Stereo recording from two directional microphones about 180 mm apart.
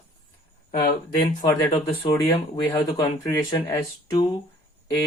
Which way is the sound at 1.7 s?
20° left (ahead or behind).